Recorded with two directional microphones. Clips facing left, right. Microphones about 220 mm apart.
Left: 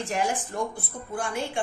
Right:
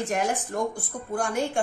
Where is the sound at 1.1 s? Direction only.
45° right (ahead or behind).